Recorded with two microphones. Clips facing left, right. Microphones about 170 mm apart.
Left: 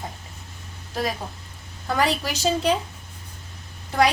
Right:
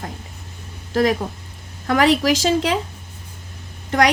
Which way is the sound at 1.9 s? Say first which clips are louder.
Right 8 dB; 90° right.